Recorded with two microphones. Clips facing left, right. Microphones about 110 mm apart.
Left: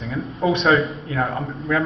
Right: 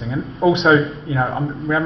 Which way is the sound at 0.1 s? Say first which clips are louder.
Right 4 dB; 20° right (ahead or behind).